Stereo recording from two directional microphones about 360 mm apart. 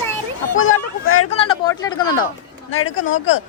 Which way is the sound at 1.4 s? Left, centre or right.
Centre.